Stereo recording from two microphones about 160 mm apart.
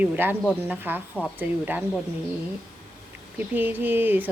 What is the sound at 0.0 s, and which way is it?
Speech, 10° right (ahead or behind).